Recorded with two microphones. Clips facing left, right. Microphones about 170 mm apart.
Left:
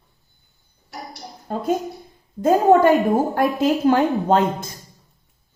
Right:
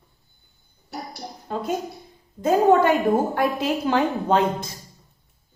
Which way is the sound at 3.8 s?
45° left (ahead or behind).